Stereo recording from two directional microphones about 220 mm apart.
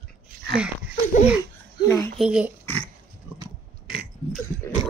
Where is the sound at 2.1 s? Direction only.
5° right (ahead or behind).